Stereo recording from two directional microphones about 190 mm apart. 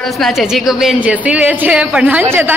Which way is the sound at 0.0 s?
Centre (ahead or behind).